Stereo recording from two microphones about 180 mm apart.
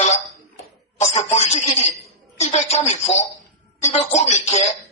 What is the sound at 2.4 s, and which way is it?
Speech, 35° left (ahead or behind).